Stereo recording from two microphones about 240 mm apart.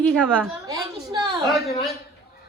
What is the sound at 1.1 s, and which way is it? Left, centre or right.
Speech, centre.